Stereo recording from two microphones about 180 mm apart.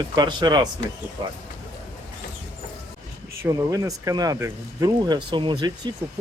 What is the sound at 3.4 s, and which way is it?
Speech, 15° right (ahead or behind).